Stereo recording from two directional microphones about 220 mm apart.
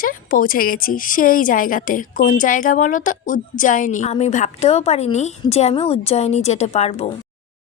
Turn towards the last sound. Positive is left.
turn(degrees=30)  # may be behind; listen again after turning